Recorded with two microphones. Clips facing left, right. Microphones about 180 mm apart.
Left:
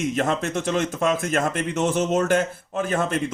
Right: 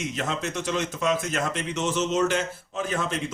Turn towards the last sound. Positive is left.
turn(degrees=50)  # may be behind; listen again after turning